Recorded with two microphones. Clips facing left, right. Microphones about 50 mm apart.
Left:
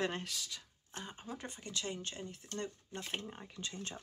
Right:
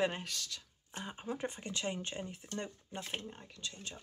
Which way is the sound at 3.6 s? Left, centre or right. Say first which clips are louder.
Left 2 dB; left.